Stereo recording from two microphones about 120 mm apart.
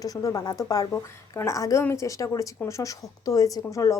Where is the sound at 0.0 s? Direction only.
30° left (ahead or behind).